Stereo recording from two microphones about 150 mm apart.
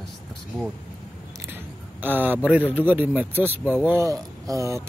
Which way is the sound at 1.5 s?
10° right (ahead or behind).